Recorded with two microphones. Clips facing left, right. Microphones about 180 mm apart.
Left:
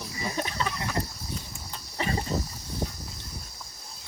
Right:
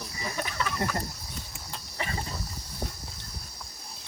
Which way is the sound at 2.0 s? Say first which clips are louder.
Left 6 dB; 35° left (ahead or behind).